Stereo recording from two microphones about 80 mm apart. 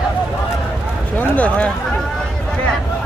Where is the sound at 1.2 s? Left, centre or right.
Centre.